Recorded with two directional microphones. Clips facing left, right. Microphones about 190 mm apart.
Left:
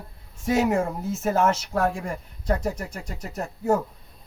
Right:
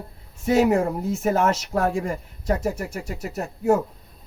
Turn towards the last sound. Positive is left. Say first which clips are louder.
# right 3 dB
turn(degrees=-5)  # may be behind; listen again after turning